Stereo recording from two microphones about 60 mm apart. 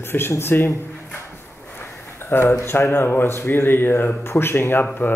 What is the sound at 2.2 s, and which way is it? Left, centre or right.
Speech, left.